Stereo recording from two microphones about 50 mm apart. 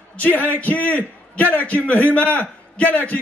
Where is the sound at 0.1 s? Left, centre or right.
Left.